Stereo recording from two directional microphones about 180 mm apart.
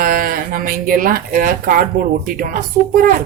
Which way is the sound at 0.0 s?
55° right (ahead or behind).